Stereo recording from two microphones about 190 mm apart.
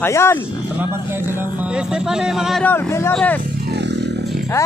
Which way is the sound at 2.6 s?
10° left (ahead or behind).